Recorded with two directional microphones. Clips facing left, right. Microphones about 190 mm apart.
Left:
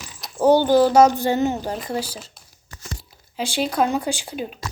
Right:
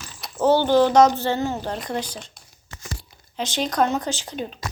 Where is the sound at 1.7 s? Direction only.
5° left (ahead or behind).